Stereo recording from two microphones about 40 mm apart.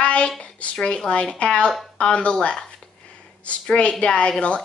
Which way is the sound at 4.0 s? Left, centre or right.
Left.